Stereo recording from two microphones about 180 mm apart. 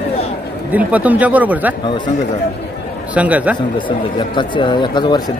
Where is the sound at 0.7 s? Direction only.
10° right (ahead or behind).